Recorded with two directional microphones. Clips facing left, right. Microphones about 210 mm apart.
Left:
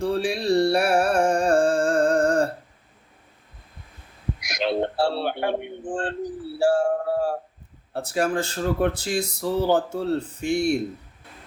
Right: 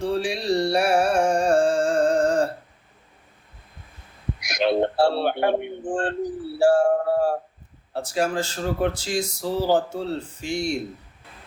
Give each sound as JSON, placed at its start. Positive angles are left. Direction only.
{"t": 0.0, "sound": "music", "side_deg": 55}
{"t": 4.4, "sound": "a sound", "side_deg": -55}
{"t": 7.9, "sound": "speech", "side_deg": 60}